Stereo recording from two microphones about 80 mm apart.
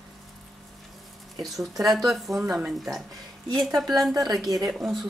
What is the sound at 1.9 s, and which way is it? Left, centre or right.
Speech, centre.